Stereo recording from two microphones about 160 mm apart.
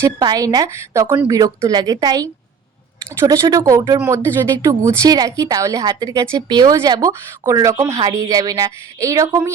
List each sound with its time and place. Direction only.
0.0 s speech: 25° right (ahead or behind)
1.4 s speech: 25° right (ahead or behind)